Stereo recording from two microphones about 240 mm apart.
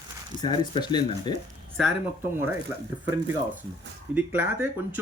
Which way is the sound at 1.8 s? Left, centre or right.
Centre.